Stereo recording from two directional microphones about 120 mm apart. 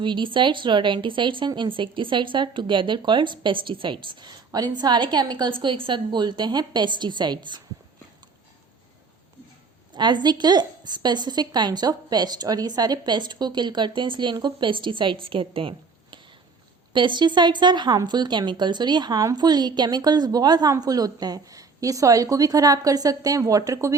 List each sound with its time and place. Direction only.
0.0 s a woman's voice: 40° right (ahead or behind)
9.9 s a woman's voice: 40° right (ahead or behind)
16.9 s a woman's voice: 40° right (ahead or behind); by 24.0 s 25° right (ahead or behind)